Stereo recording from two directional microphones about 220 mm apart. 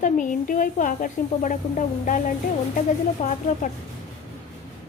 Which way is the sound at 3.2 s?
35° left (ahead or behind).